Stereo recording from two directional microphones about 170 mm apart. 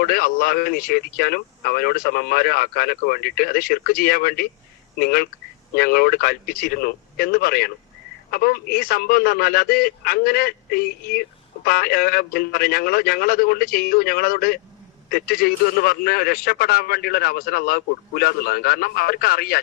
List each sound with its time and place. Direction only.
0.0 s a man's voice: 60° left (ahead or behind)